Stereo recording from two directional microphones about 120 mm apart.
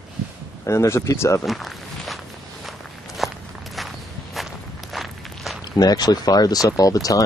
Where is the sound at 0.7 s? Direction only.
25° left (ahead or behind).